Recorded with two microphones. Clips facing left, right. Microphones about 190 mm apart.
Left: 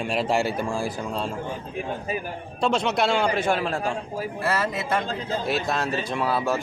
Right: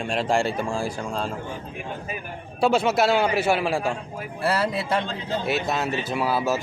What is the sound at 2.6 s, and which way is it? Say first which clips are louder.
Speech: right 3 dB; 5° right (ahead or behind).